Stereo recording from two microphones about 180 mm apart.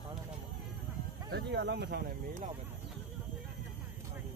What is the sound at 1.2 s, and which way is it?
Speech, 75° right (ahead or behind).